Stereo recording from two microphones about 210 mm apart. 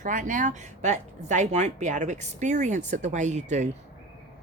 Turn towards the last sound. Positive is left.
turn(degrees=-35)  # may be behind; listen again after turning